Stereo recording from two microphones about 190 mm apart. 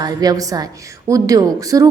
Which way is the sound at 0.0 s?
20° right (ahead or behind).